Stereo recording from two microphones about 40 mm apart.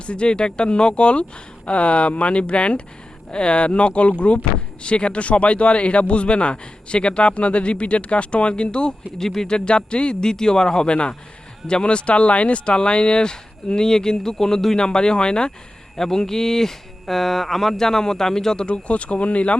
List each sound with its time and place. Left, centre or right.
0.0 s speech: left
9.2 s speech: centre
14.8 s speech: centre
18.6 s speech: left